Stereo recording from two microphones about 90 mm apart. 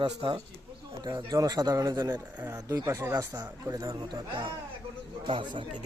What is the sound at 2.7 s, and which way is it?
Speech, 50° right (ahead or behind).